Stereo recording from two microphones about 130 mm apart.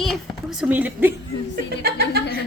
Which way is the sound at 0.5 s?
10° right (ahead or behind).